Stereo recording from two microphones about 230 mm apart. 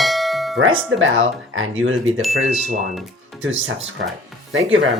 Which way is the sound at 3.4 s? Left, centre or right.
Right.